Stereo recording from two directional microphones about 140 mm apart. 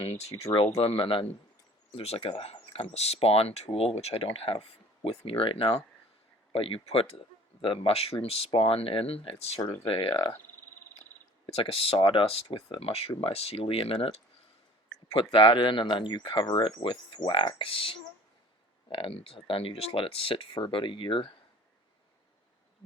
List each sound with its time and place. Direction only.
0.0 s speech: 45° left (ahead or behind)
11.4 s speech: 40° left (ahead or behind)